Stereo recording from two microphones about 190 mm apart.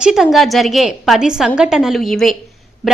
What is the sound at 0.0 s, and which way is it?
A woman's voice, centre (ahead or behind).